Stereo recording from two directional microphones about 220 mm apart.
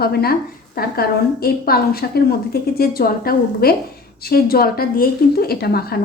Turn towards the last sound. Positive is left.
turn(degrees=45)  # may be behind; listen again after turning